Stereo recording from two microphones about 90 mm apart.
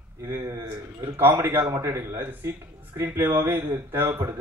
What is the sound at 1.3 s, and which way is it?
Speech, 25° right (ahead or behind).